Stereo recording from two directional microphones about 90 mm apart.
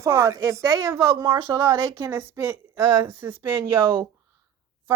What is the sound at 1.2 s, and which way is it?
Speech, 55° right (ahead or behind).